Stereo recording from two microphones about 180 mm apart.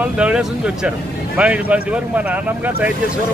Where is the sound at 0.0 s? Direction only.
5° right (ahead or behind).